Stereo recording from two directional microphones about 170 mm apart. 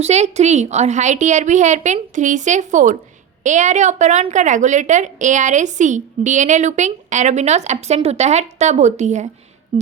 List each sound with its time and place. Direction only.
0.0 s a woman's voice: 40° right (ahead or behind)